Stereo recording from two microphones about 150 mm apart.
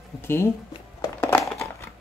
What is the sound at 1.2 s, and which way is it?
Crumpling, 15° left (ahead or behind).